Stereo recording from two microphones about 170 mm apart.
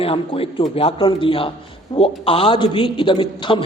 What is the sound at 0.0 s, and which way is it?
A man's voice, 35° left (ahead or behind).